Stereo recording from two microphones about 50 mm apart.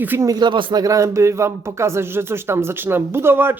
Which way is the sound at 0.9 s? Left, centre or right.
Right.